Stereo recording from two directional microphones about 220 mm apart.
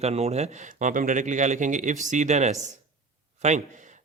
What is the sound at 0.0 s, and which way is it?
A man's voice, 30° right (ahead or behind).